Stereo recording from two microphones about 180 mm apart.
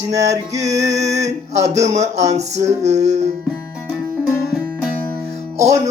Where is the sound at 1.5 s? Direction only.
40° right (ahead or behind).